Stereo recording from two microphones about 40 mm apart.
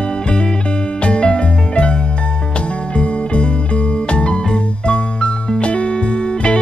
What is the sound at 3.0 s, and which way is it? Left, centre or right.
Music, left.